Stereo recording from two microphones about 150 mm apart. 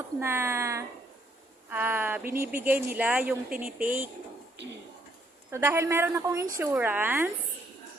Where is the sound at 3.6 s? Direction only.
70° right (ahead or behind).